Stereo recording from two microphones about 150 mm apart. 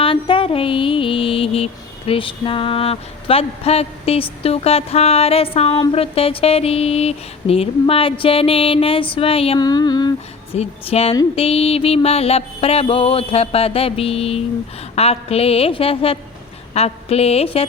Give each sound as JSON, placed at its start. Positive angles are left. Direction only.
{"t": 0.0, "sound": "music", "side_deg": 35}
{"t": 9.6, "sound": "a sound", "side_deg": 25}
{"t": 10.5, "sound": "music", "side_deg": 40}
{"t": 16.7, "sound": "a woman's voice", "side_deg": 45}